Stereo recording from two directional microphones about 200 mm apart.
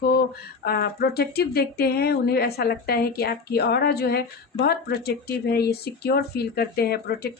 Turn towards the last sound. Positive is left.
turn(degrees=50)  # may be behind; listen again after turning